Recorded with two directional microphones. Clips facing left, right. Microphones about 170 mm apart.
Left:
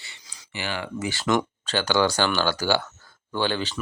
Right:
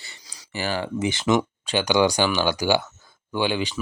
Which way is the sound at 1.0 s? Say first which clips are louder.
Right 2 dB; 20° right (ahead or behind).